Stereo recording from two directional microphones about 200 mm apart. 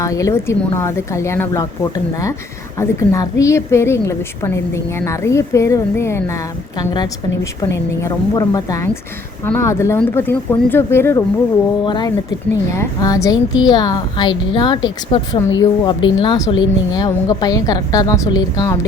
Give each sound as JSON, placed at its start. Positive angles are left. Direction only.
{"t": 0.0, "sound": "a woman's voice", "side_deg": 15}
{"t": 11.9, "sound": "a woman's voice", "side_deg": 20}